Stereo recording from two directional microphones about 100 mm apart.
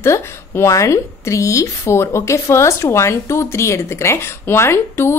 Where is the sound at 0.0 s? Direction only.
25° left (ahead or behind).